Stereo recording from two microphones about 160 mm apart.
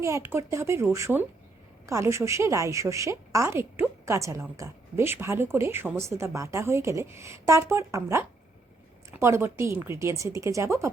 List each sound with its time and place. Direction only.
0.0 s a woman's voice: 15° right (ahead or behind)